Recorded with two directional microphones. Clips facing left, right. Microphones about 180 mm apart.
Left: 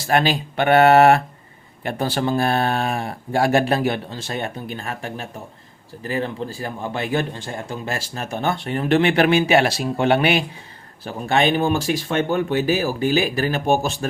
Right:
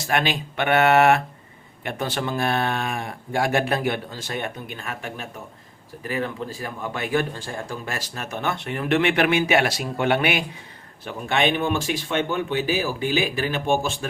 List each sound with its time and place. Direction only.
0.1 s a man's voice: 35° left (ahead or behind)